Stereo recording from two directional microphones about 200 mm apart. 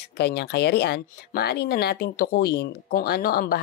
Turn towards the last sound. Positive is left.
turn(degrees=50)  # may be behind; listen again after turning